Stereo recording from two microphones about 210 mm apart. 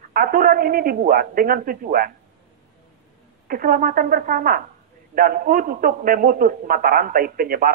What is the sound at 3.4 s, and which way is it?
A man's voice, 40° right (ahead or behind).